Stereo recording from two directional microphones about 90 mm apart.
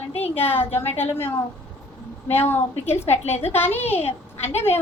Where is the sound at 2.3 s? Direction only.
25° left (ahead or behind).